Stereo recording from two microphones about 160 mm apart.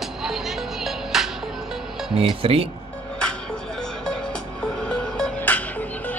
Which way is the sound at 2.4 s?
35° right (ahead or behind).